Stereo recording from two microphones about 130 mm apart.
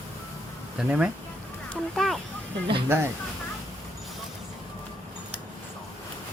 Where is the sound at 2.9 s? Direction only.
20° right (ahead or behind).